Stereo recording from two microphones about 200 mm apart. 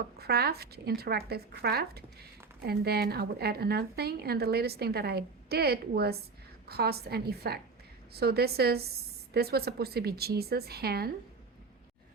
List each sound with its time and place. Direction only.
0.2 s a woman's voice: 50° right (ahead or behind)